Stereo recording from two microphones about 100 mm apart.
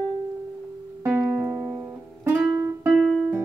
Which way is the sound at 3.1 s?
10° right (ahead or behind).